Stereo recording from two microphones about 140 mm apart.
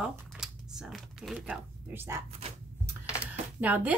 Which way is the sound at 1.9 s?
20° right (ahead or behind).